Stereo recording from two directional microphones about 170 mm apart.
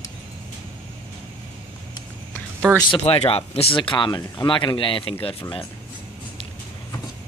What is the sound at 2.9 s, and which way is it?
Speech, 35° left (ahead or behind).